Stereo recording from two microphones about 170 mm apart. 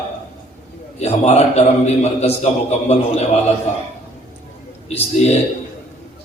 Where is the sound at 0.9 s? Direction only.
40° left (ahead or behind).